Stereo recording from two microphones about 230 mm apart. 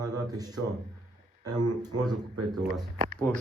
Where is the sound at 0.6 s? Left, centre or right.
Right.